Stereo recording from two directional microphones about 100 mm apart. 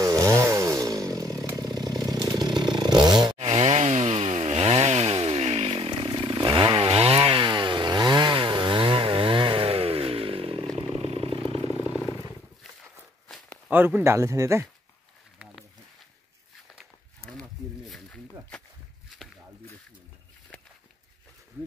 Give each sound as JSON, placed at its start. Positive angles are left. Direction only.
{"t": 0.0, "sound": "chainsaw", "side_deg": -30}
{"t": 3.3, "sound": "chainsaw", "side_deg": -85}
{"t": 6.2, "sound": "chainsaw", "side_deg": -50}
{"t": 13.7, "sound": "speech", "side_deg": -20}
{"t": 17.3, "sound": "a sound", "side_deg": 5}